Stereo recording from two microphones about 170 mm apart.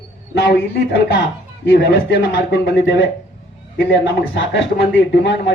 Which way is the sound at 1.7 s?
90° left.